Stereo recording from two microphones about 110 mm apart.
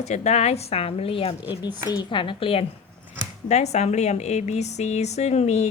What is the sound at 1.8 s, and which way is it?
Speech, 40° left (ahead or behind).